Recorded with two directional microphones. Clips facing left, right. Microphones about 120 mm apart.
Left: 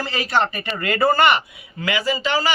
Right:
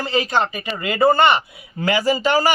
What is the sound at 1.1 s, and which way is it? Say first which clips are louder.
Speech: right 1 dB; 25° right (ahead or behind).